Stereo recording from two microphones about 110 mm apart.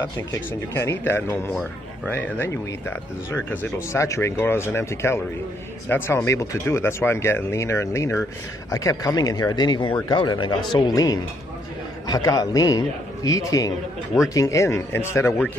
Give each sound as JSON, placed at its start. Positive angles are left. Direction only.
{"t": 0.0, "sound": "speech", "side_deg": 25}
{"t": 12.1, "sound": "speech", "side_deg": 35}